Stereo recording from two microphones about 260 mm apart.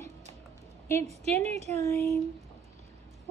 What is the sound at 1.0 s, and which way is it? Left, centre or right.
Speech, right.